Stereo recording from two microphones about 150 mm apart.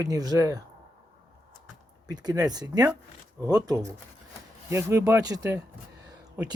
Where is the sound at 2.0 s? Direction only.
25° right (ahead or behind).